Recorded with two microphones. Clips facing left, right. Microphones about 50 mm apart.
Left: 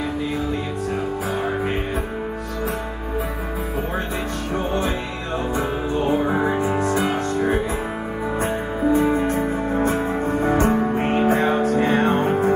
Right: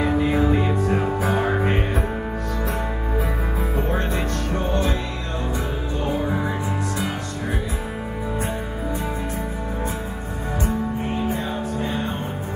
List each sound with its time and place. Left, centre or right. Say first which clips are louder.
0.0 s music: right 5 dB; centre
5.9 s music: left 4 dB; left
8.9 s music: left 11 dB; left
10.5 s music: left 4 dB; left